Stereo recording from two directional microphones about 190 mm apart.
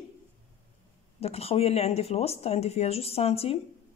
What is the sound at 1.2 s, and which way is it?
Speech, 30° left (ahead or behind).